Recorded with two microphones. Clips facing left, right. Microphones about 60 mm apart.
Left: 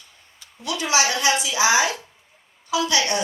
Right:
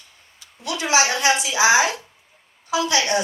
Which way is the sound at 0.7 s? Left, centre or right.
Right.